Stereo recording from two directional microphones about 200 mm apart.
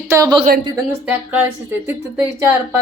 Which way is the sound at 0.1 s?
20° right (ahead or behind).